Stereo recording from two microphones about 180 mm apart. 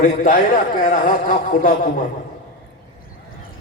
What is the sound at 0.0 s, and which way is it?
Speech, 45° left (ahead or behind).